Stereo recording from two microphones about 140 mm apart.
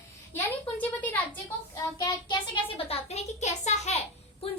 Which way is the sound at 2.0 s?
30° left (ahead or behind).